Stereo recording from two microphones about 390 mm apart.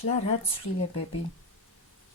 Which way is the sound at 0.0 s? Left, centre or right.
Centre.